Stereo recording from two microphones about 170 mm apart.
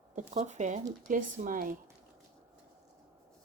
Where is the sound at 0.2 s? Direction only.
45° right (ahead or behind).